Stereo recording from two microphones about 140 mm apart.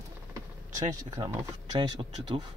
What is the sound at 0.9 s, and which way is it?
Speech, 25° right (ahead or behind).